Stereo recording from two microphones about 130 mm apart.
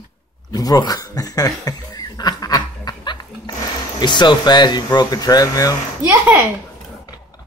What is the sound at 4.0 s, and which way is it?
Speech, 35° left (ahead or behind).